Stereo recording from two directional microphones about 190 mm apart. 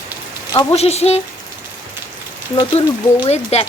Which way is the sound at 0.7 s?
35° left (ahead or behind).